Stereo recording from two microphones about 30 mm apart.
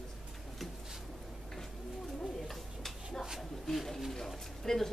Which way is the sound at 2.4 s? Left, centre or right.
Centre.